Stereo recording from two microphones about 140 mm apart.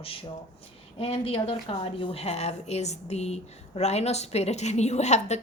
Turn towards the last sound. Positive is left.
turn(degrees=55)  # may be behind; listen again after turning